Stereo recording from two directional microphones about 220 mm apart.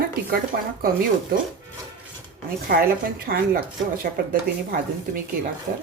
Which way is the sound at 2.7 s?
40° right (ahead or behind).